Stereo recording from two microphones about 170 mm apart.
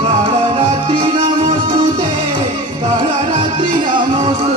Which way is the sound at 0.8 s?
25° right (ahead or behind).